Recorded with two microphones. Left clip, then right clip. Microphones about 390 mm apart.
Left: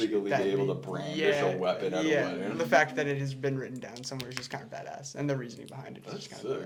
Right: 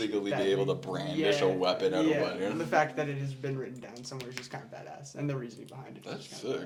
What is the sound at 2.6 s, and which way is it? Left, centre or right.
Speech, left.